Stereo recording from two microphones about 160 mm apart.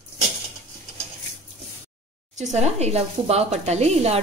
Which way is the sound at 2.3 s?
45° right (ahead or behind).